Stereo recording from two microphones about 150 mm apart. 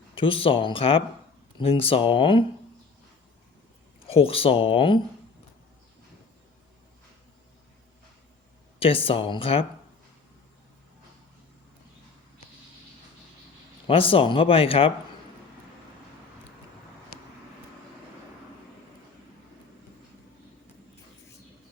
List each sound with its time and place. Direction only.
0.1 s speech: 35° left (ahead or behind)
4.0 s speech: 40° left (ahead or behind)
8.8 s speech: 40° left (ahead or behind)
13.8 s speech: 35° left (ahead or behind)